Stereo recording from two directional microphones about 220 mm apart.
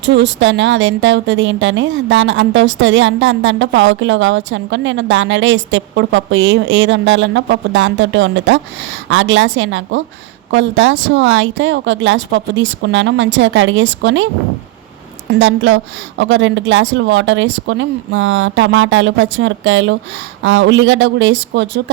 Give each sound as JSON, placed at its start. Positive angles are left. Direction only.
{"t": 0.0, "sound": "a woman's voice", "side_deg": -55}
{"t": 15.3, "sound": "a woman's voice", "side_deg": -55}